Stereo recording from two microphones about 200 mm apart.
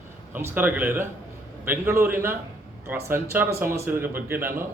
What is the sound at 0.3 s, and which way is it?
A man's voice, 10° right (ahead or behind).